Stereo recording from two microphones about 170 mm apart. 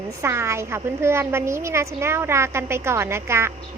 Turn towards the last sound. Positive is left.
turn(degrees=-15)  # may be behind; listen again after turning